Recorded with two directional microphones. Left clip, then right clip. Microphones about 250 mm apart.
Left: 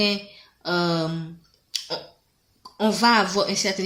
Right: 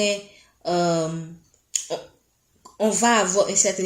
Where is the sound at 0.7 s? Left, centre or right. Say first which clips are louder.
Right 2 dB; left.